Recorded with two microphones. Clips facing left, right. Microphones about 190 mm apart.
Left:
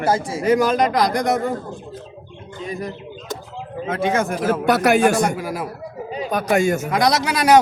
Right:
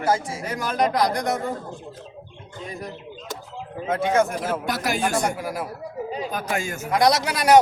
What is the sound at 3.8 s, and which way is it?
A man's voice, 90° left.